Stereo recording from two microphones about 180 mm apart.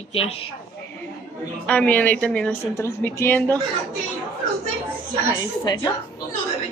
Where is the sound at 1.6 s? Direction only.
10° left (ahead or behind).